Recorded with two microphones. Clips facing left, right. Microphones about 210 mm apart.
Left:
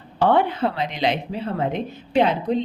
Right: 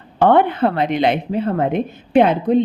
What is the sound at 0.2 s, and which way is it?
A woman's voice, 55° right (ahead or behind).